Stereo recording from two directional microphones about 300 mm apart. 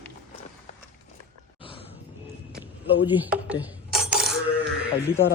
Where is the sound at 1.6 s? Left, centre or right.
Centre.